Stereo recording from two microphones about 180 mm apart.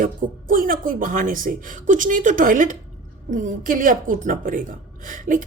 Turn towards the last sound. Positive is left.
turn(degrees=-50)  # may be behind; listen again after turning